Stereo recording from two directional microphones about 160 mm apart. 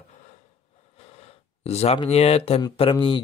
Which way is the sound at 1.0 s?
40° left (ahead or behind).